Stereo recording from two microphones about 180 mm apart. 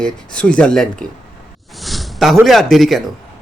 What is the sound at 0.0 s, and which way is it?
Speech, 5° left (ahead or behind).